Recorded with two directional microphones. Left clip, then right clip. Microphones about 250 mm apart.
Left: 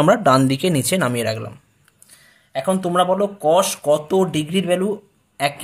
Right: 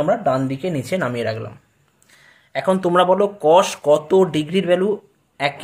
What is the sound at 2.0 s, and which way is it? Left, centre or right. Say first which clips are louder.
Speech: right 2 dB; centre.